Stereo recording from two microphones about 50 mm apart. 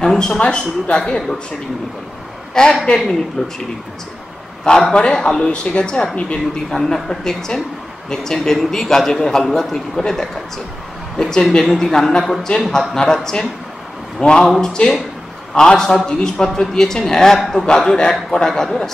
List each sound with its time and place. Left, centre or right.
0.0 s a sound: centre
0.4 s speech: left
2.5 s a man's voice: centre
4.6 s a man's voice: centre
6.7 s a man's voice: centre